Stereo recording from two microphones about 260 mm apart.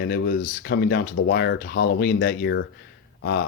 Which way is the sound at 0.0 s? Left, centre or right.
Left.